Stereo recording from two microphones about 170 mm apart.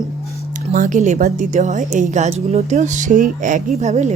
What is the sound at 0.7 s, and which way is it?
A woman's voice, 50° right (ahead or behind).